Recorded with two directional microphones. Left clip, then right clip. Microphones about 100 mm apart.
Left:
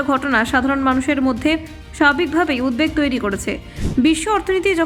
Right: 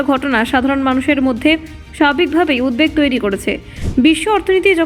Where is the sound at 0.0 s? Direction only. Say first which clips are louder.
Right 2 dB; 30° right (ahead or behind).